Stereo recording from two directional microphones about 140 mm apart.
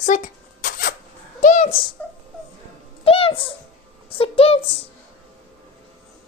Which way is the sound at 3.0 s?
40° left (ahead or behind).